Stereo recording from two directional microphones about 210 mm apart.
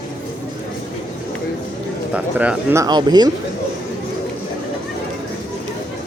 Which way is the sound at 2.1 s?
5° right (ahead or behind).